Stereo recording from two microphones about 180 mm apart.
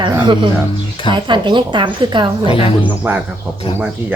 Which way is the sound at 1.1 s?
25° right (ahead or behind).